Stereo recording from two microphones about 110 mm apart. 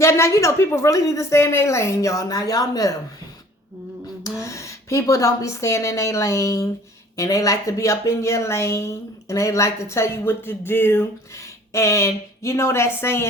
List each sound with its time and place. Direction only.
0.0 s a woman's voice: 25° left (ahead or behind)
4.2 s a woman's voice: 30° left (ahead or behind)